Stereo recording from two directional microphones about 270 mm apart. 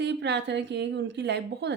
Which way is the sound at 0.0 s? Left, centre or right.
Right.